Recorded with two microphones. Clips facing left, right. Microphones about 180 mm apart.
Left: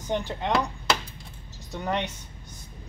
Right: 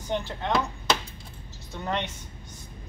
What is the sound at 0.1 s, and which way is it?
Speech, 15° left (ahead or behind).